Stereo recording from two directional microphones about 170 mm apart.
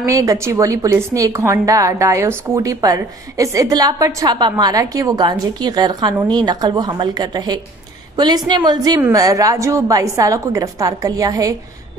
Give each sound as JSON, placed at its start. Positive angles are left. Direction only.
{"t": 0.0, "sound": "a woman's voice", "side_deg": -20}